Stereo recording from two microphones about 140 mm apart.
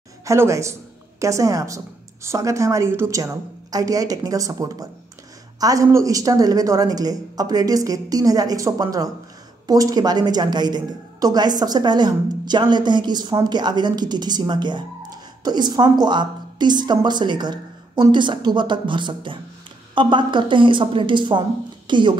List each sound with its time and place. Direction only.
0.2 s a woman's voice: 20° right (ahead or behind)